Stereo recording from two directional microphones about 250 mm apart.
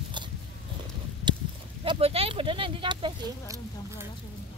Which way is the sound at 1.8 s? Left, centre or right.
Right.